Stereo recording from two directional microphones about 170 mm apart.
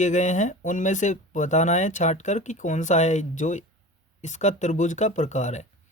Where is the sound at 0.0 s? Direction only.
45° left (ahead or behind).